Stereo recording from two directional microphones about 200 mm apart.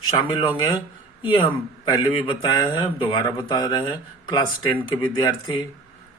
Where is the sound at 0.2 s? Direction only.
25° left (ahead or behind).